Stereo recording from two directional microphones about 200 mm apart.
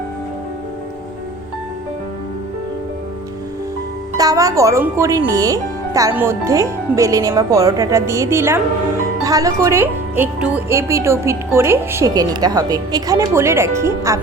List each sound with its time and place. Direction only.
4.2 s speech: 15° right (ahead or behind)